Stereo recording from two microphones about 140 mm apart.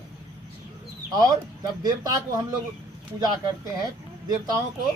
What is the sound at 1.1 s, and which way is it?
Speech, 30° right (ahead or behind).